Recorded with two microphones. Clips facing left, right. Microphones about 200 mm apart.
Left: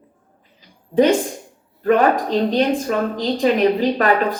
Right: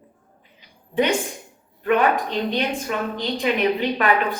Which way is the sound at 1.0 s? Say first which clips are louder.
Left 6 dB; 35° left (ahead or behind).